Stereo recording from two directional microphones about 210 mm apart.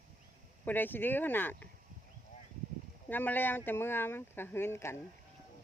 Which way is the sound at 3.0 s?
10° left (ahead or behind).